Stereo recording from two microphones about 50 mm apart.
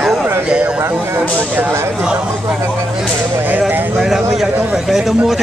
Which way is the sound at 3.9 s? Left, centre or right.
Centre.